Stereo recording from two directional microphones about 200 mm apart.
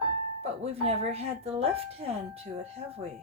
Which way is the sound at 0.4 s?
30° right (ahead or behind).